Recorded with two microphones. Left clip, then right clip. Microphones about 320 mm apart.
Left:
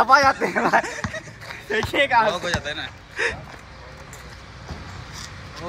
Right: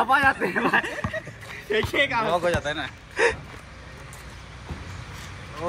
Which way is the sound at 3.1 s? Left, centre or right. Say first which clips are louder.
Right 3 dB; centre.